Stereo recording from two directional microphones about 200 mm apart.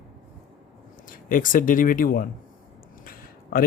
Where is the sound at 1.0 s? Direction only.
45° left (ahead or behind).